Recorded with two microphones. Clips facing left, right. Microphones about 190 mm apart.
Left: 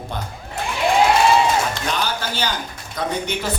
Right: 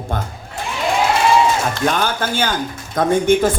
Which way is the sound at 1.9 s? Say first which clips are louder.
Right 5 dB; 50° right (ahead or behind).